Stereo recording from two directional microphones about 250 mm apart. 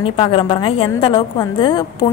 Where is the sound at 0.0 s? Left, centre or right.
Left.